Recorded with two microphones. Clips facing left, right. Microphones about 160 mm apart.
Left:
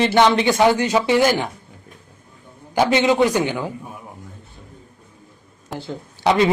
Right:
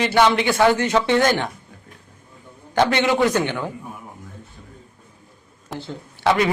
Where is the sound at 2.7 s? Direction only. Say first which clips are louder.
Left 2 dB; 10° left (ahead or behind).